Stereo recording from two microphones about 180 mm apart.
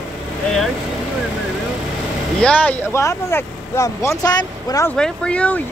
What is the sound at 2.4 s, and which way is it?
Speech, 5° left (ahead or behind).